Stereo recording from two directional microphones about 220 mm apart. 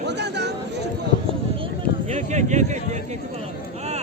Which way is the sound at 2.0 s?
30° right (ahead or behind).